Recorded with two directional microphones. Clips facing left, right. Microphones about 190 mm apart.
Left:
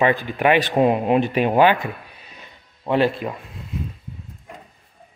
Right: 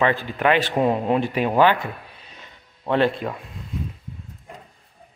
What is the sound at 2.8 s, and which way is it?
Speech, 5° left (ahead or behind).